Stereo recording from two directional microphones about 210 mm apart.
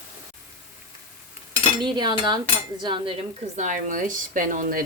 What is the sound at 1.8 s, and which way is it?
Cutlery, 20° right (ahead or behind).